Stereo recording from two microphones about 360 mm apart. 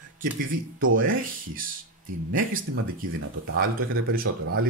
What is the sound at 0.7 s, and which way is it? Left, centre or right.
Speech, right.